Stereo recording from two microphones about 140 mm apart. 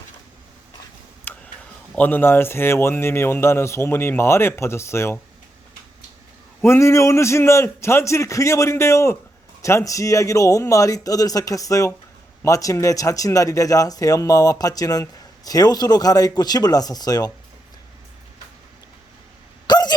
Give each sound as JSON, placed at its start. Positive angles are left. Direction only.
{"t": 1.3, "sound": "tick", "side_deg": 15}
{"t": 2.0, "sound": "a man's voice", "side_deg": 15}
{"t": 6.6, "sound": "speech", "side_deg": 20}
{"t": 19.6, "sound": "hiccup", "side_deg": 30}